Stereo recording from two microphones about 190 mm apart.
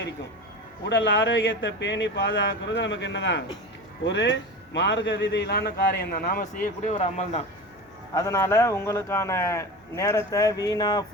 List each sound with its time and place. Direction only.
0.9 s a man's voice: 75° left (ahead or behind); by 7.4 s 35° left (ahead or behind)
8.1 s a man's voice: 15° left (ahead or behind)